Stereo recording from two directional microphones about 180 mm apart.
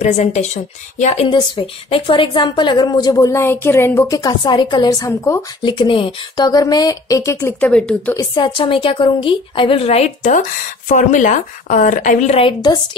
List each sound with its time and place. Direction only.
0.0 s speech: 40° left (ahead or behind); by 5.4 s 15° left (ahead or behind)
5.6 s speech: 25° left (ahead or behind); by 8.2 s 5° left (ahead or behind)
8.2 s a woman's voice: 25° left (ahead or behind)